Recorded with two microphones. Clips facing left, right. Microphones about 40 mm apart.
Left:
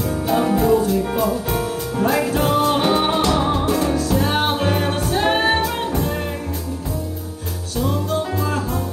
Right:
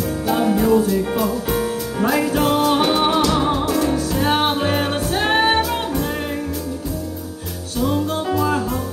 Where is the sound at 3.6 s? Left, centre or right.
Left.